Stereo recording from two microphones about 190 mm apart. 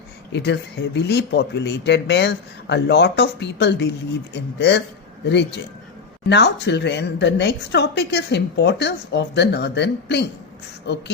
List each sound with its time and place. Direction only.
0.3 s a woman's voice: 65° left (ahead or behind)